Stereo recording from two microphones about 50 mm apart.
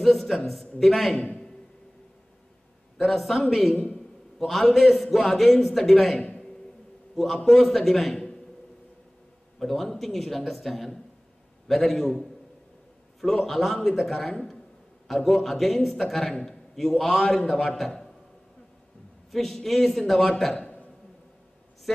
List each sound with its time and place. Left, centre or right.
0.0 s a man's voice: centre
1.1 s a man's voice: left
3.0 s a man's voice: centre
3.9 s a sound: centre
4.8 s a man's voice: centre
7.4 s a man's voice: centre
9.6 s a man's voice: centre
19.3 s a man's voice: centre
20.5 s a sound: left
21.9 s speech: centre